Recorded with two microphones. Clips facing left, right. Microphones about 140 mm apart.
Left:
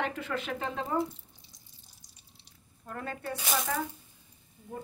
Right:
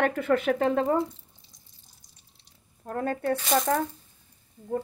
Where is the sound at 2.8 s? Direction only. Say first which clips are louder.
Right 9 dB; 45° right (ahead or behind).